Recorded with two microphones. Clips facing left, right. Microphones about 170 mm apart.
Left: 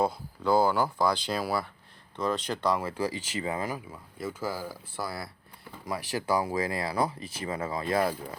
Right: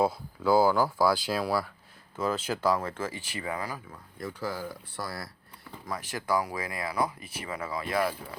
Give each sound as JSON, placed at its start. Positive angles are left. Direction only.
{"t": 0.0, "sound": "speech", "side_deg": -5}
{"t": 2.7, "sound": "speech", "side_deg": 10}
{"t": 4.2, "sound": "speech", "side_deg": 5}
{"t": 6.2, "sound": "speech", "side_deg": 20}